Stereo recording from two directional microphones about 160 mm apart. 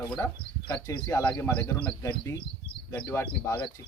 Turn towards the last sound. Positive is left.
turn(degrees=15)  # may be behind; listen again after turning